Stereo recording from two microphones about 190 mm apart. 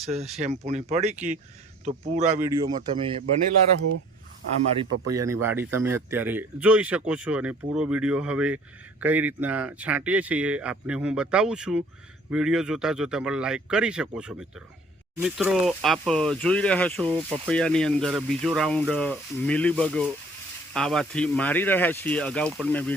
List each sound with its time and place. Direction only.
0.0 s speech: 35° right (ahead or behind)
2.4 s speech: 15° right (ahead or behind)
2.9 s speech: 30° right (ahead or behind)
4.8 s speech: 15° right (ahead or behind); by 23.0 s 10° left (ahead or behind)